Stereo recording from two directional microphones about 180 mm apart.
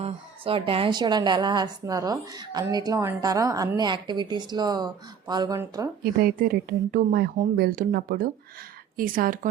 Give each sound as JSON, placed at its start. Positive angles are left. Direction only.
{"t": 0.0, "sound": "a woman's voice", "side_deg": -30}
{"t": 6.0, "sound": "speech", "side_deg": -55}